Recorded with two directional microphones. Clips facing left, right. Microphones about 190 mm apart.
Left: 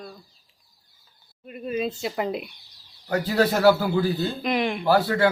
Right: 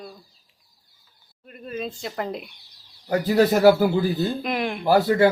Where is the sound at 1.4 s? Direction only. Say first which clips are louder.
Left 4 dB; 5° left (ahead or behind).